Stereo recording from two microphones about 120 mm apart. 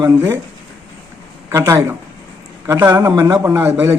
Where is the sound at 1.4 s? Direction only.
25° right (ahead or behind).